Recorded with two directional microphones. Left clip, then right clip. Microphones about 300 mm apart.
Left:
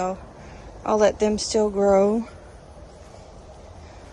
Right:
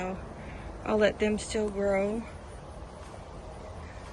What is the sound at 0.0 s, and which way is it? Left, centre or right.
Speech, centre.